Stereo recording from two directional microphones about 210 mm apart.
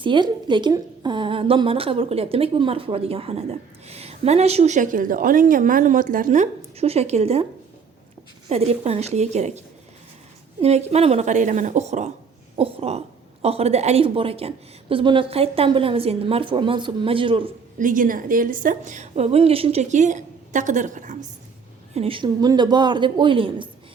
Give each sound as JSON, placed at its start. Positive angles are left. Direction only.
{"t": 0.0, "sound": "a woman's voice", "side_deg": -20}
{"t": 8.4, "sound": "a woman's voice", "side_deg": -30}
{"t": 17.7, "sound": "a woman's voice", "side_deg": -40}
{"t": 21.9, "sound": "a woman's voice", "side_deg": -25}